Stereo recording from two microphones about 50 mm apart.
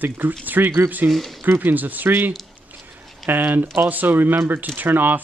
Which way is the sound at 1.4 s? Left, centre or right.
Right.